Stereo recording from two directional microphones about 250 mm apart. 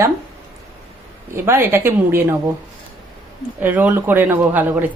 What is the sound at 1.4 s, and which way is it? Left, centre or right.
Speech, centre.